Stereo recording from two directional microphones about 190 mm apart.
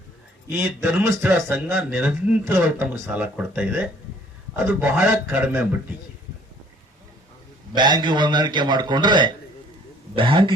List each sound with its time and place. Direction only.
0.5 s speech: 10° right (ahead or behind)
7.8 s a man's voice: 25° right (ahead or behind)